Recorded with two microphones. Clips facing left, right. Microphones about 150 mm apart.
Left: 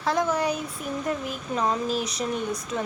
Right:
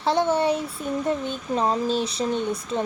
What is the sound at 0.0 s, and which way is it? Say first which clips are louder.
Speech: right 3 dB; 30° right (ahead or behind).